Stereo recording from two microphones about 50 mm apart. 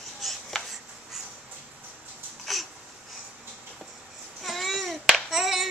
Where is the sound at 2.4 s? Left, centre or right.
Centre.